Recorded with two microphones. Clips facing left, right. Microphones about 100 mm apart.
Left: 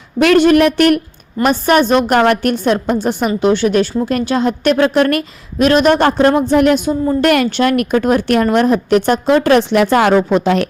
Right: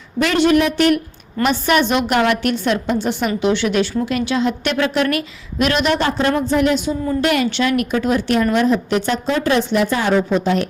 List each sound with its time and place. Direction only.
0.2 s a woman's voice: 55° left (ahead or behind)
1.5 s a woman's voice: 40° left (ahead or behind)
6.4 s a woman's voice: 60° left (ahead or behind); by 10.7 s 85° left